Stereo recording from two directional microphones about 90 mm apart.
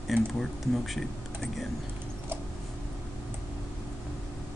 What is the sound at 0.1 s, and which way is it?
Speech, centre (ahead or behind).